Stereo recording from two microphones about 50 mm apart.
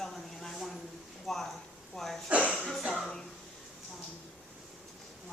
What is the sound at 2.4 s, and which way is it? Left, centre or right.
Speech, left.